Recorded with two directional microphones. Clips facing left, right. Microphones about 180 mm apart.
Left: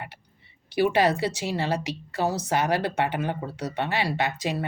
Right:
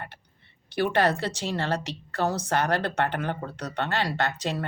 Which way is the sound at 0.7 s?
10° left (ahead or behind).